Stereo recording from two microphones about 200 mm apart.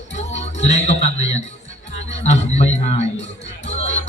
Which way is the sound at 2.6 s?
35° left (ahead or behind).